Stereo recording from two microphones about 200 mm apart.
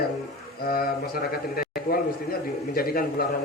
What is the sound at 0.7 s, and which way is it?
Speech, 50° left (ahead or behind).